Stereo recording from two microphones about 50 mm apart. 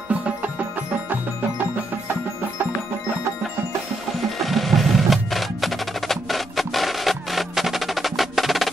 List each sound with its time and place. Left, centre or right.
0.1 s music: right
4.4 s music: centre